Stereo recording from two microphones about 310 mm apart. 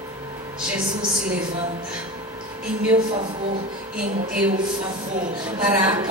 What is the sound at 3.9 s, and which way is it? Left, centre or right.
Speech, right.